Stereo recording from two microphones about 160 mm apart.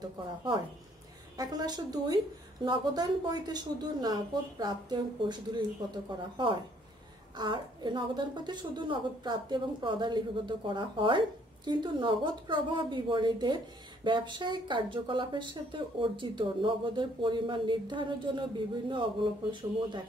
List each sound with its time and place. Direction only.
1.3 s a woman's voice: 25° right (ahead or behind)